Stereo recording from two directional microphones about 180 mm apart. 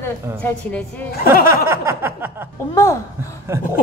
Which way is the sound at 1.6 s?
15° right (ahead or behind).